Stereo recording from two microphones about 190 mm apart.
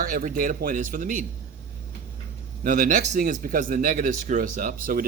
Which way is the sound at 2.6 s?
45° right (ahead or behind).